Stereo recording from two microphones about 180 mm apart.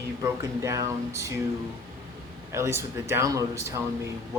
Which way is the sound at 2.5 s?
15° right (ahead or behind).